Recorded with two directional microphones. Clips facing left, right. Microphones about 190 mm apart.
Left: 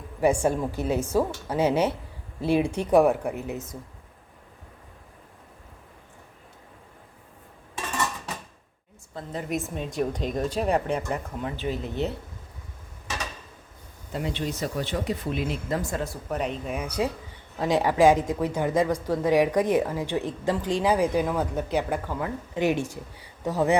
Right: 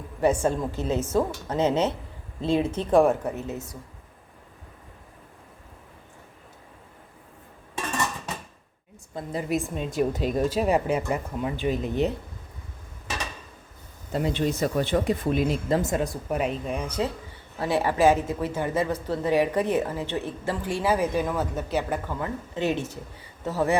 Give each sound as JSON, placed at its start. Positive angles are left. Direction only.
{"t": 0.2, "sound": "a woman's voice", "side_deg": 10}
{"t": 9.1, "sound": "speech", "side_deg": -5}
{"t": 14.1, "sound": "speech", "side_deg": -45}
{"t": 15.7, "sound": "a woman's voice", "side_deg": -20}